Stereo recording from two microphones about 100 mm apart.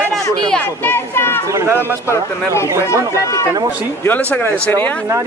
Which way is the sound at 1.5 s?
30° right (ahead or behind).